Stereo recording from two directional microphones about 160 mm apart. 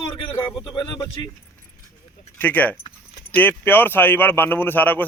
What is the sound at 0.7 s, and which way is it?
Speech, 30° left (ahead or behind).